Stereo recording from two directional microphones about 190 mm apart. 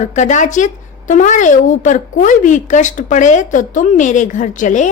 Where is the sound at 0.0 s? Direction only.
40° left (ahead or behind).